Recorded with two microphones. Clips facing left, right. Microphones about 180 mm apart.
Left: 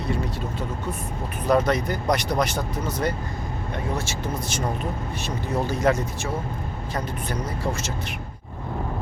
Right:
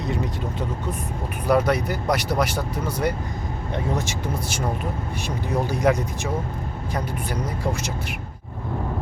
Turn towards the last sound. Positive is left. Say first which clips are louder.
# right 1 dB
turn(degrees=-10)  # may be behind; listen again after turning